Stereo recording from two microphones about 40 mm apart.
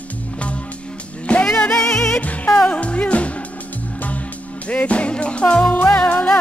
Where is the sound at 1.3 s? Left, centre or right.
Left.